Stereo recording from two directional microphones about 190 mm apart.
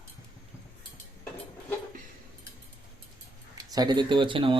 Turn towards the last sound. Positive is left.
turn(degrees=-25)  # may be behind; listen again after turning